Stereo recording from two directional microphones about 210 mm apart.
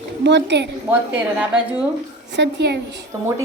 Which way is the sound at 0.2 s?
55° right (ahead or behind).